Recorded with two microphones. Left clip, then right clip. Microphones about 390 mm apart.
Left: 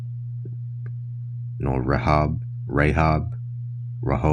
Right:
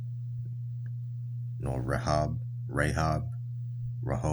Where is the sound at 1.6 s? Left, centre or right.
Right.